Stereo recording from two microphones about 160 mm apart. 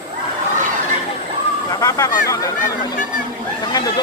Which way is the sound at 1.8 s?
20° left (ahead or behind).